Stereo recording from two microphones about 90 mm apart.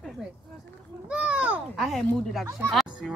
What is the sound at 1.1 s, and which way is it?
Speech, 15° right (ahead or behind).